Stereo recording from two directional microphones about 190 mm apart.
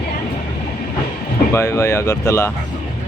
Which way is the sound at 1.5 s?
15° left (ahead or behind).